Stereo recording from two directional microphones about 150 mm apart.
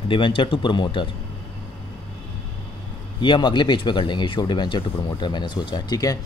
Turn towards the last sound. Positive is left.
turn(degrees=25)  # may be behind; listen again after turning